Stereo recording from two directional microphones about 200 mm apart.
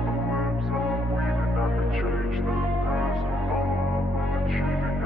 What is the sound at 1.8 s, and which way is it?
Music, centre (ahead or behind).